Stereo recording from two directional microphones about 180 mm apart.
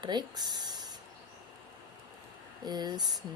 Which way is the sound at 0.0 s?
25° right (ahead or behind).